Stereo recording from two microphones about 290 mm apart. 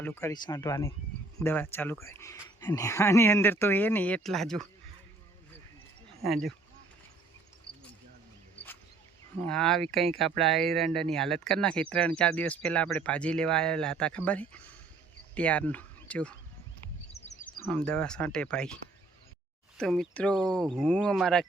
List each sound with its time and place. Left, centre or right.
0.0 s speech: centre
6.2 s speech: centre
9.4 s speech: centre
17.1 s a sound: left
17.7 s speech: centre